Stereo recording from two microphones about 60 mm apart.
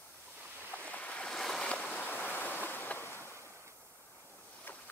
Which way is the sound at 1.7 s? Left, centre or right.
Left.